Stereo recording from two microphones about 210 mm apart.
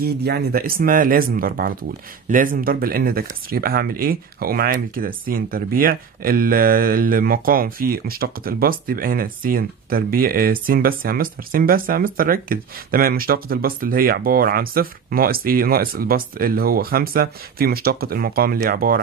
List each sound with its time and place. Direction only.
0.0 s speech: 50° right (ahead or behind)